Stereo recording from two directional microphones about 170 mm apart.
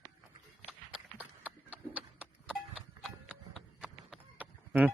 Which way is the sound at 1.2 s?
10° right (ahead or behind).